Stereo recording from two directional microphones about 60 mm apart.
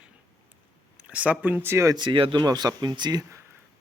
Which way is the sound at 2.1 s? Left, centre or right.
Right.